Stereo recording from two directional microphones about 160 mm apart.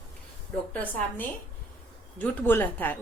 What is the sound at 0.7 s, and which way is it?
A woman's voice, 10° left (ahead or behind).